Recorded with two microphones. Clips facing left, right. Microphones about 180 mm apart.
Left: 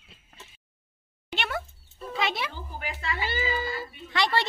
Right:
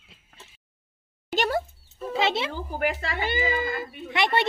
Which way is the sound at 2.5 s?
55° right (ahead or behind).